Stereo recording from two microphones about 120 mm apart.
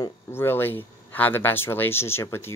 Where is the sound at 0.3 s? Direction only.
20° left (ahead or behind).